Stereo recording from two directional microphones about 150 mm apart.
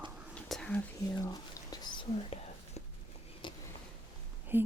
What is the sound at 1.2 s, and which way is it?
Whispering, 25° left (ahead or behind).